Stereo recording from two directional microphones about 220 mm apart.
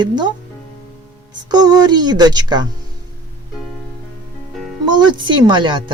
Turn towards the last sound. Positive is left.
turn(degrees=-20)  # may be behind; listen again after turning